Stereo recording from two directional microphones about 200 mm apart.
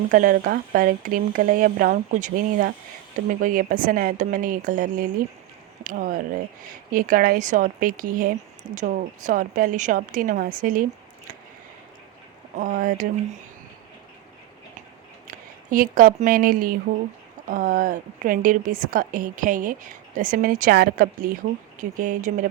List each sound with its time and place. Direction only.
0.1 s speech: 40° right (ahead or behind)
12.5 s a woman's voice: 40° right (ahead or behind)
15.3 s a woman's voice: 45° right (ahead or behind)